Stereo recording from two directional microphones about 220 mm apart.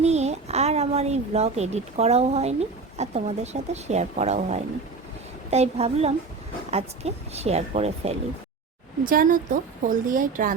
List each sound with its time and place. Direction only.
0.0 s a child's voice: 30° right (ahead or behind)
9.0 s speech: 40° right (ahead or behind)